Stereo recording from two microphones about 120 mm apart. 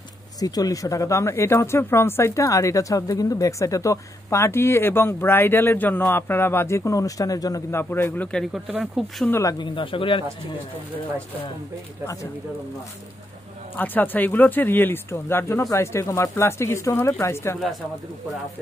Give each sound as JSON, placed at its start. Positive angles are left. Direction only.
{"t": 0.4, "sound": "speech", "side_deg": 30}
{"t": 7.7, "sound": "speech", "side_deg": 20}
{"t": 8.3, "sound": "speech", "side_deg": 0}
{"t": 9.3, "sound": "speech", "side_deg": 25}
{"t": 9.6, "sound": "speech", "side_deg": 45}
{"t": 13.7, "sound": "speech", "side_deg": 15}